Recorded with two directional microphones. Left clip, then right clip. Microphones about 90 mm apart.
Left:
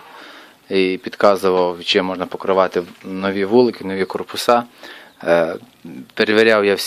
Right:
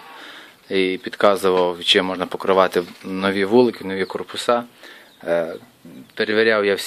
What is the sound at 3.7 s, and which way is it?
Speech, 30° left (ahead or behind).